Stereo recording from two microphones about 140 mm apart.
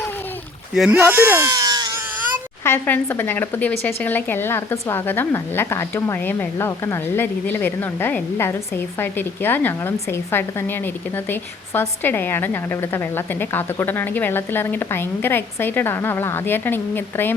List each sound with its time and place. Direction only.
0.7 s speech: 5° right (ahead or behind); by 1.9 s 30° right (ahead or behind)
2.6 s speech: 15° left (ahead or behind)